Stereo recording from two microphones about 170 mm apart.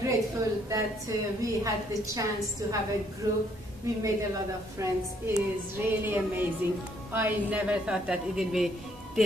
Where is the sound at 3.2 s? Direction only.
20° right (ahead or behind).